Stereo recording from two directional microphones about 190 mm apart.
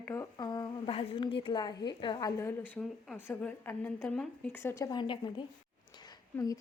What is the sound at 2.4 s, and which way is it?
A woman's voice, 10° left (ahead or behind).